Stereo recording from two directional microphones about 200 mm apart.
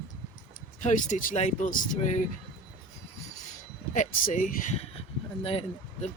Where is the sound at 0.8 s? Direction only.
40° left (ahead or behind).